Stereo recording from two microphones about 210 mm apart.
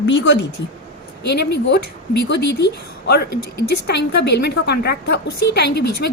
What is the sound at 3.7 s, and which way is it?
A woman's voice, 55° left (ahead or behind).